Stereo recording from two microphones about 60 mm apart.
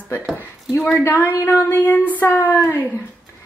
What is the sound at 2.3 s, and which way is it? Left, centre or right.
Speech, left.